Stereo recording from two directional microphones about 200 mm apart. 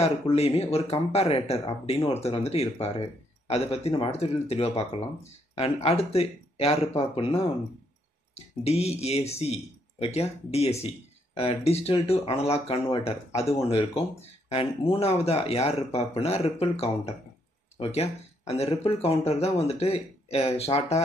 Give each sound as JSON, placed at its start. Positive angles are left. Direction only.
{"t": 0.0, "sound": "speech", "side_deg": 30}
{"t": 8.4, "sound": "speech", "side_deg": 30}